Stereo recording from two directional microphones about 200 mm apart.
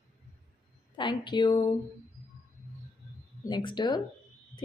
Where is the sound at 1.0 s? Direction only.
25° left (ahead or behind).